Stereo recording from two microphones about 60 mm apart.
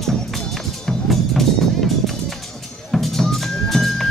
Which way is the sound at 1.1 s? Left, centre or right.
Centre.